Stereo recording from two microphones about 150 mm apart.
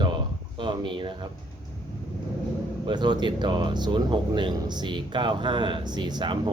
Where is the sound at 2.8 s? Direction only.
30° right (ahead or behind).